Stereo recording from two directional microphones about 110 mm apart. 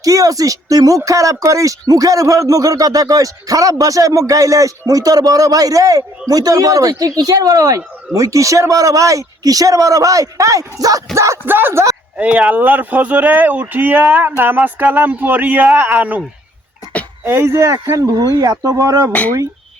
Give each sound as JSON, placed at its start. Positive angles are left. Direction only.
{"t": 0.0, "sound": "speech", "side_deg": -30}
{"t": 12.1, "sound": "speech", "side_deg": -10}
{"t": 17.2, "sound": "speech", "side_deg": -20}